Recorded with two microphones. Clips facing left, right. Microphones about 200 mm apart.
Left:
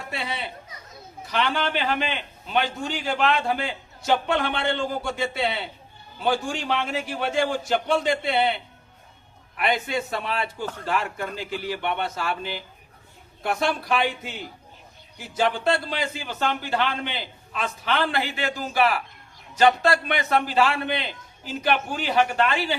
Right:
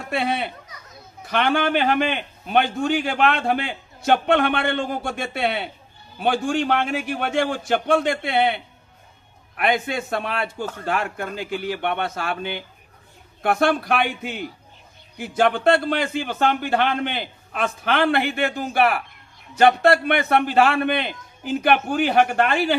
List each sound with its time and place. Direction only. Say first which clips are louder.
0.1 s a man's voice: right 9 dB; 55° right (ahead or behind)